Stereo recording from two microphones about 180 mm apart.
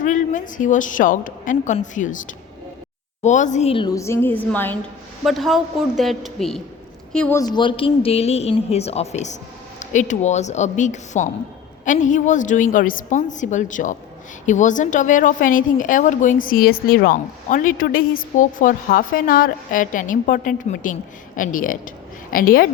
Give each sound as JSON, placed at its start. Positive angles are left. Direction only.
{"t": 0.0, "sound": "a woman's voice", "side_deg": 45}
{"t": 7.3, "sound": "a woman's voice", "side_deg": 25}